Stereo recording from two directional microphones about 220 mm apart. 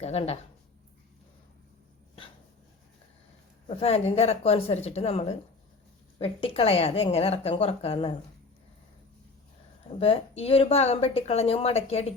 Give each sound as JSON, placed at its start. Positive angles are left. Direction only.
{"t": 0.0, "sound": "speech", "side_deg": 30}
{"t": 3.7, "sound": "speech", "side_deg": 25}
{"t": 10.0, "sound": "speech", "side_deg": 25}